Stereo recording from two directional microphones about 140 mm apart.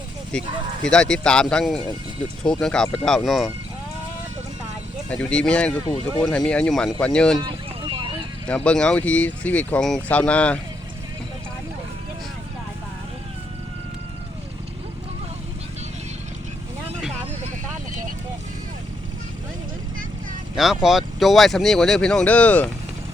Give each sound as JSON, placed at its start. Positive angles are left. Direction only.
{"t": 0.3, "sound": "speech", "side_deg": 5}
{"t": 5.0, "sound": "speech", "side_deg": 5}
{"t": 7.3, "sound": "a sound", "side_deg": -35}
{"t": 8.4, "sound": "speech", "side_deg": 10}
{"t": 20.6, "sound": "speech", "side_deg": 0}